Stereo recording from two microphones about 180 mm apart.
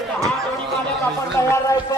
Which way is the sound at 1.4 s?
15° left (ahead or behind).